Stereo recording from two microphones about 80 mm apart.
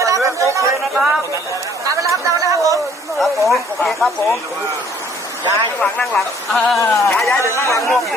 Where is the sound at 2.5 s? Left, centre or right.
Right.